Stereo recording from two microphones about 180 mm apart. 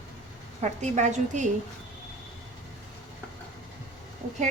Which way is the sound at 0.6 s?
40° right (ahead or behind).